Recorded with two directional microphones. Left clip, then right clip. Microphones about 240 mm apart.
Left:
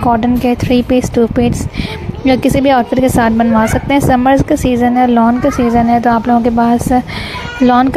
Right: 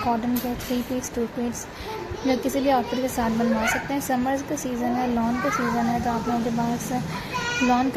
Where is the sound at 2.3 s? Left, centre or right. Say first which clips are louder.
Left 12 dB; left.